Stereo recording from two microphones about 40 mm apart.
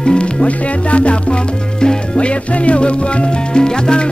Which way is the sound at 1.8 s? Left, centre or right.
Left.